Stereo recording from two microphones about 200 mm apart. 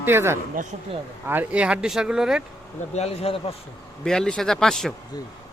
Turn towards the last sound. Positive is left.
turn(degrees=0)  # may be behind; listen again after turning